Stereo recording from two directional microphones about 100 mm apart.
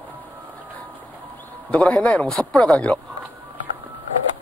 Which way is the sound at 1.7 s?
15° left (ahead or behind).